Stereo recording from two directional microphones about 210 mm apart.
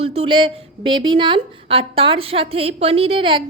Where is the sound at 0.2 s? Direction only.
25° right (ahead or behind).